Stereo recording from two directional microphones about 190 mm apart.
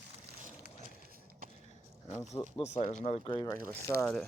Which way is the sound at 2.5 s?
35° left (ahead or behind).